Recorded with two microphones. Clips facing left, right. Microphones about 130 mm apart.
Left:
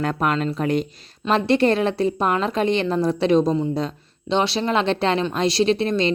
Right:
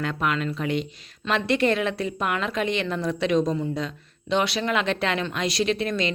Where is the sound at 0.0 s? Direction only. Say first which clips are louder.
Left 4 dB; 40° left (ahead or behind).